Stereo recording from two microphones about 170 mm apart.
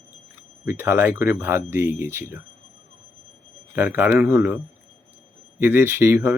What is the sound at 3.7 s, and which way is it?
Speech, 10° right (ahead or behind).